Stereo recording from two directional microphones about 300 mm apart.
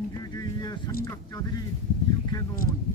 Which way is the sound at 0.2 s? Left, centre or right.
Centre.